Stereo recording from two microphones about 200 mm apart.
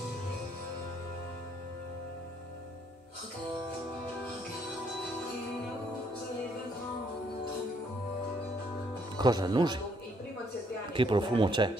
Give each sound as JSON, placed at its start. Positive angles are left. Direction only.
{"t": 9.1, "sound": "speech", "side_deg": -20}
{"t": 10.9, "sound": "speech", "side_deg": -25}